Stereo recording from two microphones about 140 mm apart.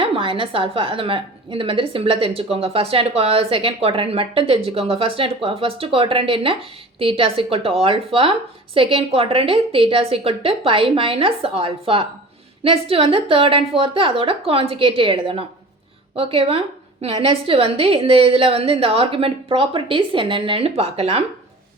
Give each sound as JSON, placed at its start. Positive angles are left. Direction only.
{"t": 0.0, "sound": "a woman's voice", "side_deg": -40}